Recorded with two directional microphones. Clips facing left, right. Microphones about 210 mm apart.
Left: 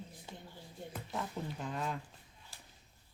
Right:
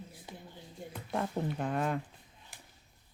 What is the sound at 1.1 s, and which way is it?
Speech, 60° right (ahead or behind).